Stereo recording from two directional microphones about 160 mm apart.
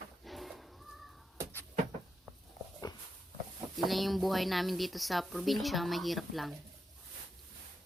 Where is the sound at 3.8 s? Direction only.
Centre (ahead or behind).